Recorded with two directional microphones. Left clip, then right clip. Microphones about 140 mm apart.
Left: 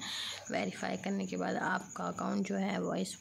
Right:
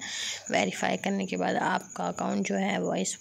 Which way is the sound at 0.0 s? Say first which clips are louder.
Right 5 dB; 20° right (ahead or behind).